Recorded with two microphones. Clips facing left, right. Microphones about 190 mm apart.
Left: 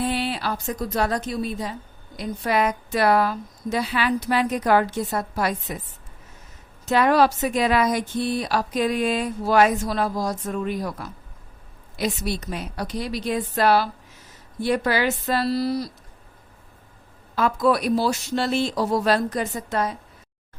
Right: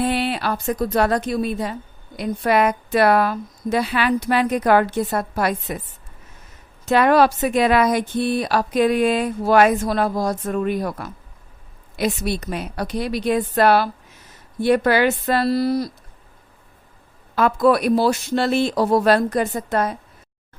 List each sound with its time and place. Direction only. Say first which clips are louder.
0.0 s a woman's voice: right 4 dB; 60° right (ahead or behind)
6.8 s speech: right 3 dB; 60° right (ahead or behind)
17.3 s speech: right 4 dB; 60° right (ahead or behind)